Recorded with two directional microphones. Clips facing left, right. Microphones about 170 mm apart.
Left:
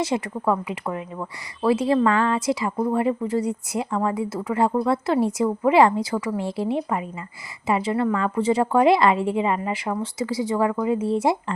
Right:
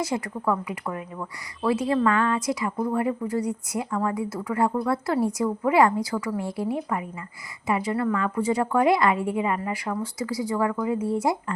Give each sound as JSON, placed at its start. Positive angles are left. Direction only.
{"t": 0.0, "sound": "speech", "side_deg": 25}